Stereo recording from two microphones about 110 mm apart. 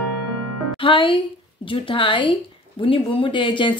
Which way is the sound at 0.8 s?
50° left (ahead or behind).